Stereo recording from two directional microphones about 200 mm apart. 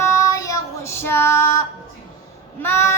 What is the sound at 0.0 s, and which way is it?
Child singing, 15° left (ahead or behind).